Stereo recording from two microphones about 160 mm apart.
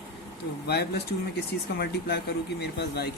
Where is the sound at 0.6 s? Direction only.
90° left.